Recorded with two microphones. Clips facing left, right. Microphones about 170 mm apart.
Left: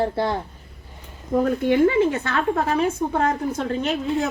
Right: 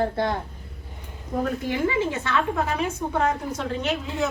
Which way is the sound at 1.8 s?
50° left (ahead or behind).